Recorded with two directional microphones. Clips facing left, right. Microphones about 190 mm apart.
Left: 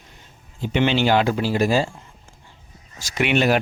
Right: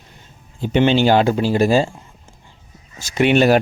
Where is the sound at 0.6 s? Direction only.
35° right (ahead or behind).